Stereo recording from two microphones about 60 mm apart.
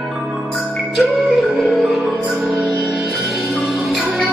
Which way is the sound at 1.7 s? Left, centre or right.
Centre.